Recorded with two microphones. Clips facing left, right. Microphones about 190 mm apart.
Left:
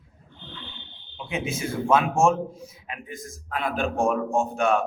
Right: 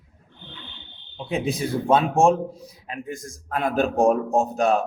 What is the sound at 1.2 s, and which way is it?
A man's voice, 35° right (ahead or behind).